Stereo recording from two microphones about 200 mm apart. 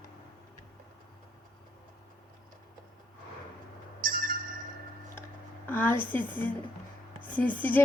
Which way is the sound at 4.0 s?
45° right (ahead or behind).